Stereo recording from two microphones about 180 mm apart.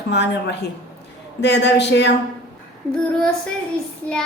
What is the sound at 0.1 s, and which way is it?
A woman's voice, 75° left (ahead or behind).